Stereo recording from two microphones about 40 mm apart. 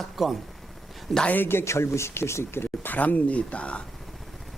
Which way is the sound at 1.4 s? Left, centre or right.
Left.